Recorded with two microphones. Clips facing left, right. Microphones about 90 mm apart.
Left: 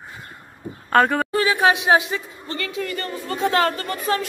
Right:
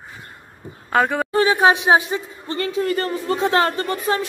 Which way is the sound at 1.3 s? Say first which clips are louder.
Right 3 dB; 30° right (ahead or behind).